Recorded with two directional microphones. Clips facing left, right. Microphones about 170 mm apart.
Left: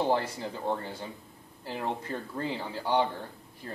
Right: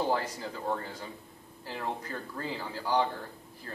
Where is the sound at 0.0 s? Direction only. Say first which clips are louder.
Left 2 dB; 25° left (ahead or behind).